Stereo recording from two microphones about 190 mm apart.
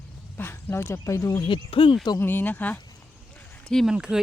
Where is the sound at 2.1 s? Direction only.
10° left (ahead or behind).